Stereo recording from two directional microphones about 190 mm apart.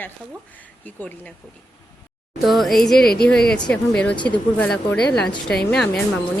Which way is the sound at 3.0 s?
55° left (ahead or behind).